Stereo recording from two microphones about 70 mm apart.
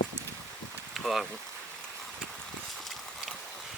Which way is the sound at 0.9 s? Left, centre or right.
Centre.